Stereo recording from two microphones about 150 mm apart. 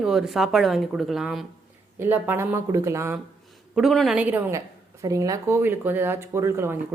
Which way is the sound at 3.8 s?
Centre (ahead or behind).